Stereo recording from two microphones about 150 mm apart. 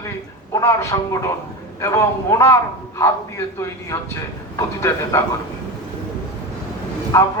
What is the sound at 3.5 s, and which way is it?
A man's voice, 20° left (ahead or behind).